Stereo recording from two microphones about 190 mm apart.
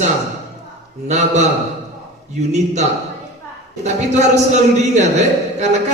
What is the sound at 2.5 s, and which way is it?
Speech, 40° right (ahead or behind).